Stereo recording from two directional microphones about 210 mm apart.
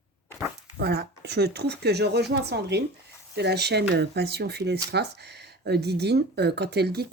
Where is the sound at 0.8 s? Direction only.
50° right (ahead or behind).